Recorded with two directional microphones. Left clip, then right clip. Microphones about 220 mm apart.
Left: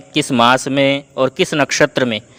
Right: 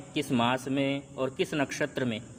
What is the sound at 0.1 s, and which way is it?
A man's voice, 45° left (ahead or behind).